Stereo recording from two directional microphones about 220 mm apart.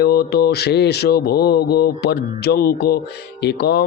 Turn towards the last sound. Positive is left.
turn(degrees=45)  # may be behind; listen again after turning